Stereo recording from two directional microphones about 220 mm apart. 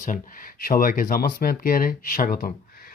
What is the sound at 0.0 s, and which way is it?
Speech, 35° left (ahead or behind).